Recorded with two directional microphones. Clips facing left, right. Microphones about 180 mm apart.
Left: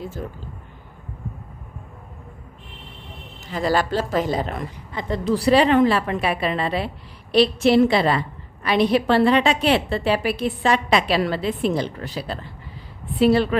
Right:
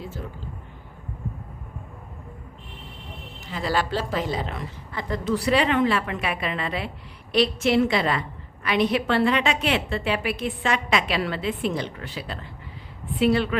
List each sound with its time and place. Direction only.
3.5 s a woman's voice: 45° left (ahead or behind)
4.9 s a woman's voice: 20° left (ahead or behind)
5.3 s a woman's voice: 35° left (ahead or behind)